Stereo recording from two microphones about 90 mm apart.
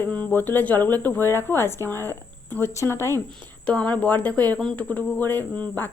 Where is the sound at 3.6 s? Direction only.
15° left (ahead or behind).